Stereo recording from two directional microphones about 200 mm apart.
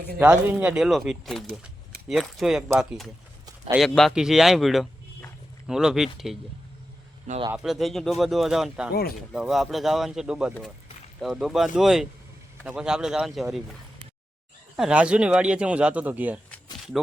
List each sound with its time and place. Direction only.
0.2 s speech: 5° right (ahead or behind)
7.5 s speech: centre (ahead or behind)
8.9 s speech: 50° left (ahead or behind)
9.3 s speech: centre (ahead or behind)
14.8 s speech: 5° right (ahead or behind)